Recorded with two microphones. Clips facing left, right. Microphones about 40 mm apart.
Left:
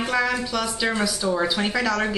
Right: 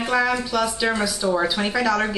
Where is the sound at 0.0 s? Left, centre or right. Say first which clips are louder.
Right 2 dB; centre.